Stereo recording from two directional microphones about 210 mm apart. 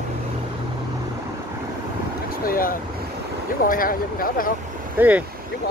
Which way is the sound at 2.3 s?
45° left (ahead or behind).